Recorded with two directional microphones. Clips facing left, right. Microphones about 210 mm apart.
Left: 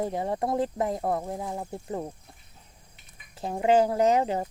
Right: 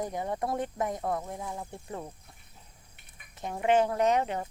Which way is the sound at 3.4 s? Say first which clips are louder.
Left 3 dB; 30° left (ahead or behind).